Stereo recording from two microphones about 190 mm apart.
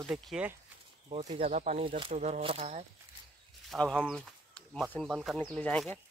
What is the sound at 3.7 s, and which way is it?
Speech, 5° left (ahead or behind).